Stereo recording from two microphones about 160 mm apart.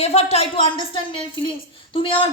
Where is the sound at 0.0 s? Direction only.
40° left (ahead or behind).